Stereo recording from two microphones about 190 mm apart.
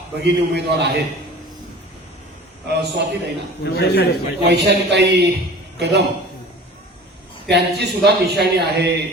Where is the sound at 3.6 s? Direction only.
60° left (ahead or behind).